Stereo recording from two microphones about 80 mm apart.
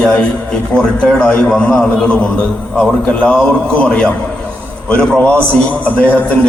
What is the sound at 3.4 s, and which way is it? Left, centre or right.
A man's voice, centre.